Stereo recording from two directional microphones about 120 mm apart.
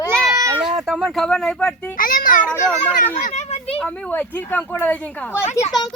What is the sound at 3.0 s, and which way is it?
Speech, 90° left.